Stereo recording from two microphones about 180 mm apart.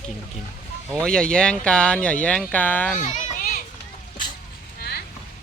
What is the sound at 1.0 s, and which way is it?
Speech, 5° left (ahead or behind).